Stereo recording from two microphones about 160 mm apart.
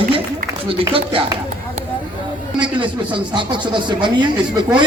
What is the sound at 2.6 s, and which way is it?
A man's voice, 30° right (ahead or behind).